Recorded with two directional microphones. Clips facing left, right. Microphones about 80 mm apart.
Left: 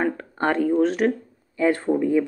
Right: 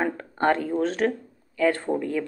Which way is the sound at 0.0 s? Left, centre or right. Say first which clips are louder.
Even; centre.